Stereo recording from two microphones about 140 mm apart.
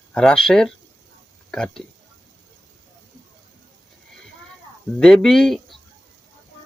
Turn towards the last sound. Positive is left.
turn(degrees=0)  # may be behind; listen again after turning